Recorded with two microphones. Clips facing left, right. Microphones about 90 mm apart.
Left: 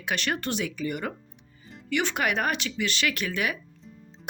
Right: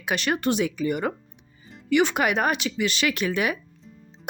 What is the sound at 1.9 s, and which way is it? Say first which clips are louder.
Speech: right 6 dB; 15° right (ahead or behind).